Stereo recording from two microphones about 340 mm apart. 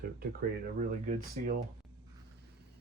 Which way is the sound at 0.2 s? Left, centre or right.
Right.